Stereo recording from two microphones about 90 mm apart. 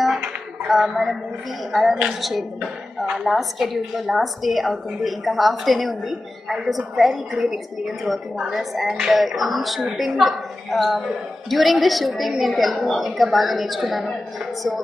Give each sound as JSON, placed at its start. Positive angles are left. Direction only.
{"t": 0.8, "sound": "speech", "side_deg": -5}